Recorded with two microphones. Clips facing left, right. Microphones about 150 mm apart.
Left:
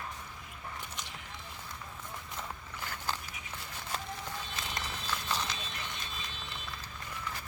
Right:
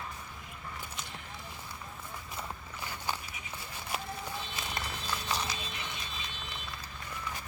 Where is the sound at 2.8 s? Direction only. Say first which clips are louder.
Right 1 dB; 15° right (ahead or behind).